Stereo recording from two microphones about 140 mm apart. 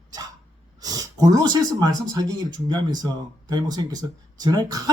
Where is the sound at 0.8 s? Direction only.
25° right (ahead or behind).